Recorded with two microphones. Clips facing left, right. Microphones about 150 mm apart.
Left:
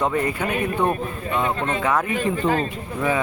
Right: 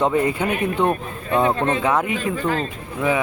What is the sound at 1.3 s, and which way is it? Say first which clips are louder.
Speech: right 5 dB; 35° right (ahead or behind).